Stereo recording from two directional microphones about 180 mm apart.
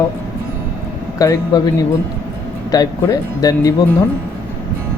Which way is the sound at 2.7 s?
20° left (ahead or behind).